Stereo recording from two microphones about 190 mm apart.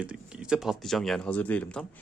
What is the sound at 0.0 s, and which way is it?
Speech, 5° right (ahead or behind).